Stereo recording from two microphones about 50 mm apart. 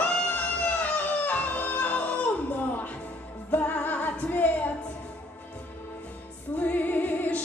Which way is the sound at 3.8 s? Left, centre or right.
Left.